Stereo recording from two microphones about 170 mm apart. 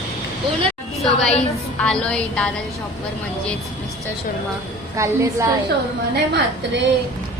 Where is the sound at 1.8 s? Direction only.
5° left (ahead or behind).